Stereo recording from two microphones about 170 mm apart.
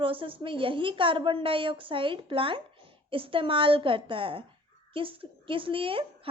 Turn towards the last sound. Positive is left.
turn(degrees=-30)  # may be behind; listen again after turning